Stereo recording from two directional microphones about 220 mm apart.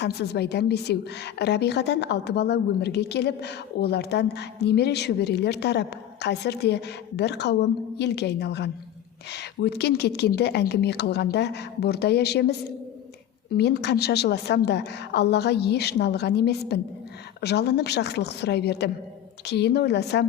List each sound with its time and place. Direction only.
0.0 s a woman's voice: 50° left (ahead or behind)